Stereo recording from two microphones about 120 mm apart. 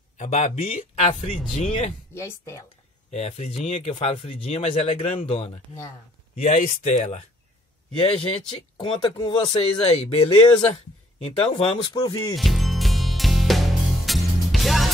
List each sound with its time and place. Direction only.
0.2 s speech: 65° left (ahead or behind)
2.1 s speech: 25° left (ahead or behind)
3.1 s speech: 65° left (ahead or behind)
6.3 s speech: 85° left
8.0 s speech: 50° left (ahead or behind); by 12.4 s 35° left (ahead or behind)
12.4 s music: centre (ahead or behind)